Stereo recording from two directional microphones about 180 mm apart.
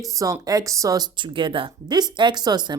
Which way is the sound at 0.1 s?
20° right (ahead or behind).